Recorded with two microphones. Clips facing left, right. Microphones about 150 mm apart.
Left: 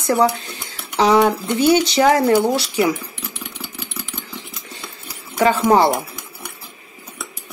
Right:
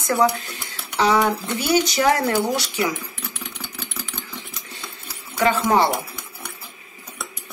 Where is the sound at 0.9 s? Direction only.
30° left (ahead or behind).